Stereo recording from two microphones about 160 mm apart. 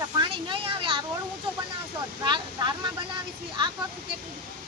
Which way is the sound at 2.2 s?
30° right (ahead or behind).